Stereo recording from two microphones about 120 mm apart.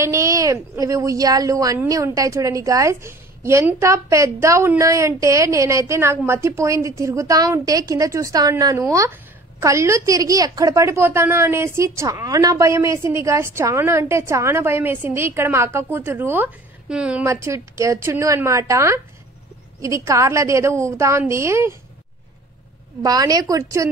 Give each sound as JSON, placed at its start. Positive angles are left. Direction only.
{"t": 0.0, "sound": "a woman's voice", "side_deg": -25}
{"t": 17.3, "sound": "a woman's voice", "side_deg": -25}
{"t": 23.0, "sound": "a woman's voice", "side_deg": -30}